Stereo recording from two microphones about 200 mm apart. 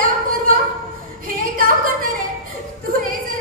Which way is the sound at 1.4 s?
45° right (ahead or behind).